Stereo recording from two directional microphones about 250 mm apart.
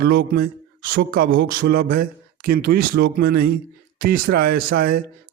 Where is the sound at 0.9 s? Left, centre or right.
Right.